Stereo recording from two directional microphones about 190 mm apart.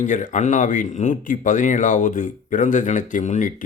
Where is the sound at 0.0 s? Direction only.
40° left (ahead or behind).